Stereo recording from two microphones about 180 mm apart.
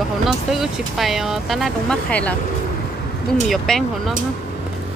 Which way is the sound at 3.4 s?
Centre (ahead or behind).